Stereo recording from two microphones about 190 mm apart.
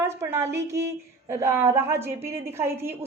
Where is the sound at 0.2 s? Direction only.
15° right (ahead or behind).